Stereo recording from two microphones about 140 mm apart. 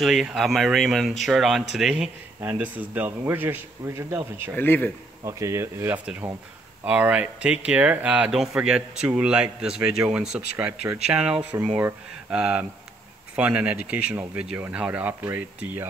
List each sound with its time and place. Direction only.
0.0 s speech: centre (ahead or behind); by 4.2 s 20° right (ahead or behind)
4.6 s speech: 15° left (ahead or behind)
5.2 s speech: 20° right (ahead or behind)
6.8 s speech: 10° right (ahead or behind)